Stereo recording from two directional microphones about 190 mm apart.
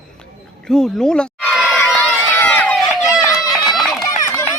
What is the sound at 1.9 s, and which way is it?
Run, 10° left (ahead or behind).